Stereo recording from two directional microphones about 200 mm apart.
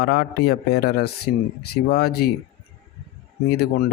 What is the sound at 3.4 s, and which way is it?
Speech, 50° left (ahead or behind).